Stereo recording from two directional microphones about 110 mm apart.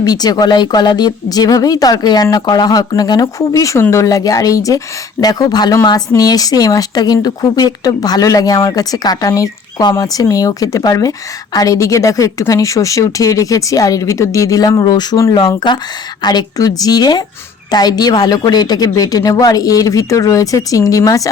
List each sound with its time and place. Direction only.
0.0 s speech: 35° left (ahead or behind)